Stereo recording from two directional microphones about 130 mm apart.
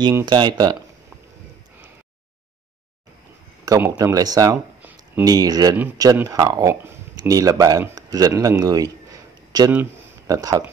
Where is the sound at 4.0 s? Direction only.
30° right (ahead or behind).